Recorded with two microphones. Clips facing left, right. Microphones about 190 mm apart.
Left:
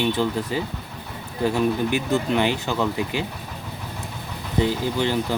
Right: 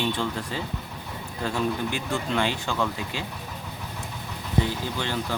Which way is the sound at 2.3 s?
15° left (ahead or behind).